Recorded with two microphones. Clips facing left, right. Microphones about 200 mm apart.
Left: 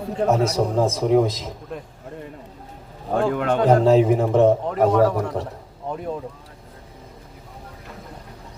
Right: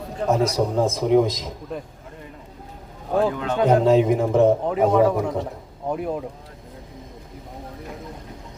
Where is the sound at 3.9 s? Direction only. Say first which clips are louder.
Left 1 dB; 35° left (ahead or behind).